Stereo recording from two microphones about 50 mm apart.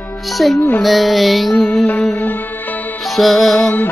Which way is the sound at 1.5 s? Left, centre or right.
Centre.